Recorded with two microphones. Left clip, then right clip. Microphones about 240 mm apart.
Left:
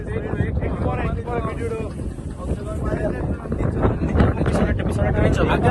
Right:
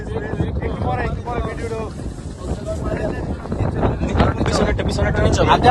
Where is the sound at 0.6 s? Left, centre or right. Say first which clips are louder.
Right 4 dB; right.